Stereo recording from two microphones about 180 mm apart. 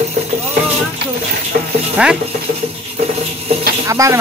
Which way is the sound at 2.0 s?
5° right (ahead or behind).